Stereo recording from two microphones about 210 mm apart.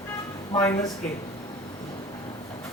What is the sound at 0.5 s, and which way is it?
Speech, 15° left (ahead or behind).